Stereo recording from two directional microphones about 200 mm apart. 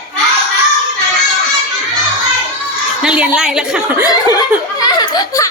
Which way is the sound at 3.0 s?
5° right (ahead or behind).